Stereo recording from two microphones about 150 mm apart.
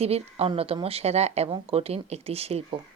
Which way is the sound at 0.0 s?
40° right (ahead or behind).